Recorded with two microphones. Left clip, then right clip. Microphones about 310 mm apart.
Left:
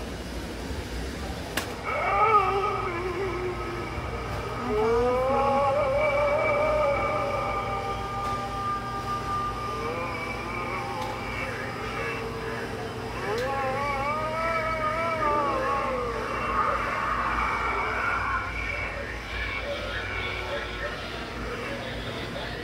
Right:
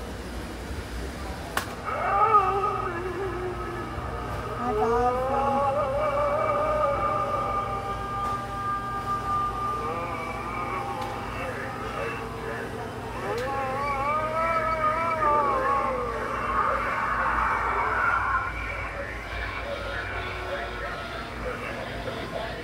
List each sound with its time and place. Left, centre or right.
1.5 s cat: centre
4.7 s music: centre
15.3 s cat: centre
16.4 s a sound: centre